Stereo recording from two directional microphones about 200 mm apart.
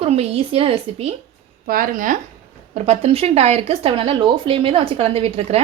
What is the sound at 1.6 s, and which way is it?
Speech, 45° right (ahead or behind).